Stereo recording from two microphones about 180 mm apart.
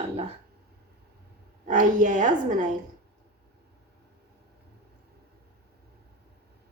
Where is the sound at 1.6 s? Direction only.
45° right (ahead or behind).